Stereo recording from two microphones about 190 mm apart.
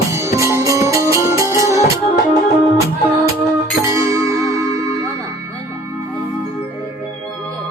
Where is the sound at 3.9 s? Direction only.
15° right (ahead or behind).